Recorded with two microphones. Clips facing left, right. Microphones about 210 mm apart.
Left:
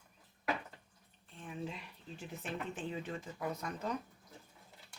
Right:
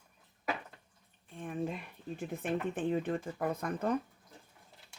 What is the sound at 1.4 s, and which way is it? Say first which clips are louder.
Speech: right 7 dB; 50° right (ahead or behind).